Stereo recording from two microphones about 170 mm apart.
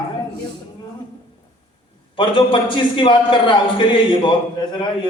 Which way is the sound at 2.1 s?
30° left (ahead or behind).